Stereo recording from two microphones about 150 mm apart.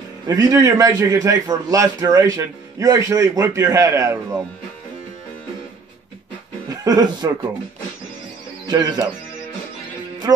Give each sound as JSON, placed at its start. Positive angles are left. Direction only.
{"t": 0.3, "sound": "a man's voice", "side_deg": -25}
{"t": 6.8, "sound": "a man's voice", "side_deg": -25}
{"t": 8.6, "sound": "a man's voice", "side_deg": -25}